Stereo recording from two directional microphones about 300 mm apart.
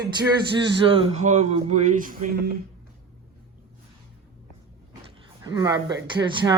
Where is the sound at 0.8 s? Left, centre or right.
Centre.